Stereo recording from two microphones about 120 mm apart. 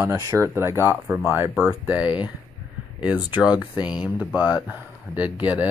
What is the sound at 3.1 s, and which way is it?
Speech, 10° right (ahead or behind).